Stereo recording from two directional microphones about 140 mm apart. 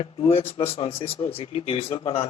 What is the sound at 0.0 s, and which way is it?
Speech, 45° left (ahead or behind).